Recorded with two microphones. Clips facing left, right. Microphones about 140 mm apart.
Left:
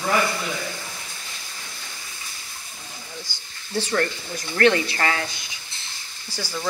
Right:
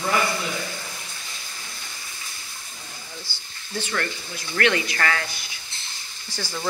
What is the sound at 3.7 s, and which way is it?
Speech, 35° left (ahead or behind).